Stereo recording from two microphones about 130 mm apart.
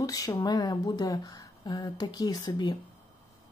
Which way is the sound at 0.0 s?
25° left (ahead or behind).